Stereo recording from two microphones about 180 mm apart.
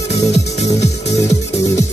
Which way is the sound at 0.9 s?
35° left (ahead or behind).